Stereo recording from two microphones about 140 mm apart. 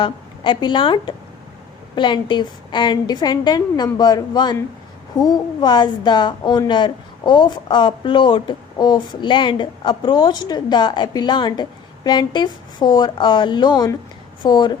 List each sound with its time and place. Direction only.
0.0 s a woman's voice: 35° left (ahead or behind)